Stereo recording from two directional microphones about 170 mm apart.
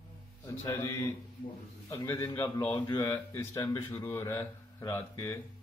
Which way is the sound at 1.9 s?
15° left (ahead or behind).